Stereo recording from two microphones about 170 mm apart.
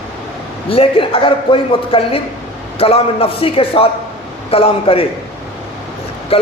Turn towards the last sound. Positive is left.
turn(degrees=35)  # may be behind; listen again after turning